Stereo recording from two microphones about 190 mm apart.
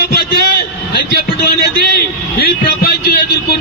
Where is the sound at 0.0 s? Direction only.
55° left (ahead or behind).